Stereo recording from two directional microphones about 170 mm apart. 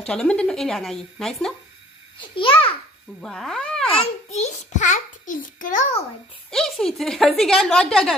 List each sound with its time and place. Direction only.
0.0 s a woman's voice: 5° left (ahead or behind)
2.1 s a child's voice: 30° left (ahead or behind)
3.2 s a woman's voice: 5° left (ahead or behind)
3.8 s a child's voice: 35° left (ahead or behind); by 5.9 s 50° left (ahead or behind)
6.5 s a woman's voice: centre (ahead or behind)